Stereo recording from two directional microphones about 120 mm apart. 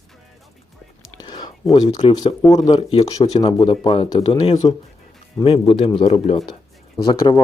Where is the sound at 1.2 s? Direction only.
35° left (ahead or behind).